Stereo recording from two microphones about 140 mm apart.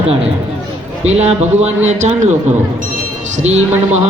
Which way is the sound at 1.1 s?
50° right (ahead or behind).